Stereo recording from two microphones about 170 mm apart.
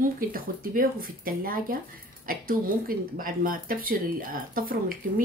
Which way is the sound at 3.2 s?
55° right (ahead or behind).